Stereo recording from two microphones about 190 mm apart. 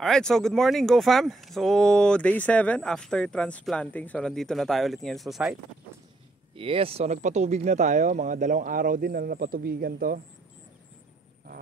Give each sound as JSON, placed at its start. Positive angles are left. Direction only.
{"t": 0.0, "sound": "speech", "side_deg": 0}
{"t": 6.5, "sound": "speech", "side_deg": -30}